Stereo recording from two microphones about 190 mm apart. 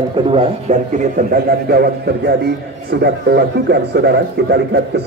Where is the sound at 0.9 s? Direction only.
50° right (ahead or behind).